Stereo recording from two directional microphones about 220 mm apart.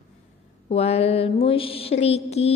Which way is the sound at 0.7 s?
30° left (ahead or behind).